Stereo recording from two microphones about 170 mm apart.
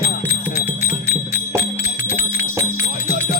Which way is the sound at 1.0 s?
15° right (ahead or behind).